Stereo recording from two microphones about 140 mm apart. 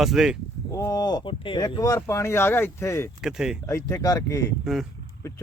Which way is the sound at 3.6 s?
20° left (ahead or behind).